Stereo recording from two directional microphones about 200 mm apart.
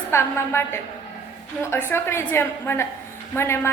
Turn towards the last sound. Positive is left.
turn(degrees=15)  # may be behind; listen again after turning